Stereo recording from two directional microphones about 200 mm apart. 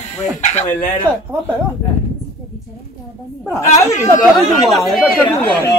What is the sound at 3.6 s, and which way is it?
Speech, 35° left (ahead or behind).